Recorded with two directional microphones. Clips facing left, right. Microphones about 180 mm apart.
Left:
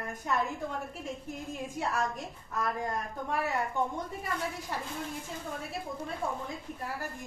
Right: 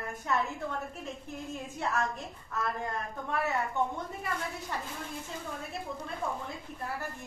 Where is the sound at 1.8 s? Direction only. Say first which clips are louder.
Even; 10° left (ahead or behind).